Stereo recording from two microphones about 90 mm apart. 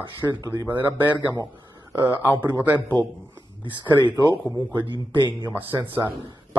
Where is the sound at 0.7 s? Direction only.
20° right (ahead or behind).